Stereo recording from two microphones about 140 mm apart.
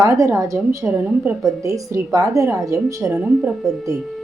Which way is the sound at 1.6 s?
25° right (ahead or behind).